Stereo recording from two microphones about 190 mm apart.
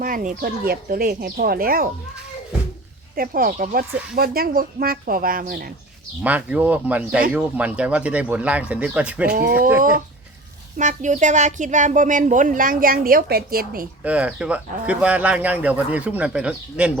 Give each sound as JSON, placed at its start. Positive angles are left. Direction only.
{"t": 0.0, "sound": "a woman's voice", "side_deg": -45}
{"t": 3.2, "sound": "a woman's voice", "side_deg": -50}
{"t": 6.2, "sound": "speech", "side_deg": -10}
{"t": 9.3, "sound": "a woman's voice", "side_deg": -55}
{"t": 9.6, "sound": "speech", "side_deg": -10}
{"t": 10.8, "sound": "a woman's voice", "side_deg": -40}
{"t": 14.0, "sound": "speech", "side_deg": -5}